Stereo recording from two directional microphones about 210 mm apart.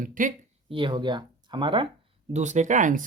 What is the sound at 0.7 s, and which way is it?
Speech, 25° right (ahead or behind).